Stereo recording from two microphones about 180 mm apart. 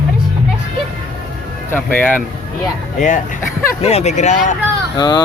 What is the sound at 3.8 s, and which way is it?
Speech, 35° left (ahead or behind).